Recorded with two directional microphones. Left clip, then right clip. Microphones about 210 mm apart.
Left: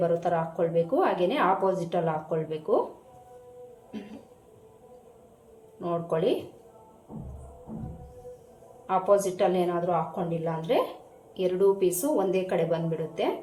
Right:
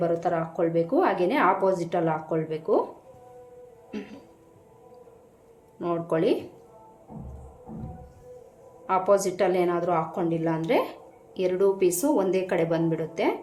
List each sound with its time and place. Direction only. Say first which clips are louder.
0.0 s speech: even; 20° right (ahead or behind)
5.8 s speech: right 2 dB; 30° right (ahead or behind)
8.9 s speech: right 1 dB; 25° right (ahead or behind)